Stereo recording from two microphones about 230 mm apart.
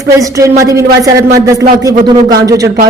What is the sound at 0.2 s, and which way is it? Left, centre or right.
Speech, centre.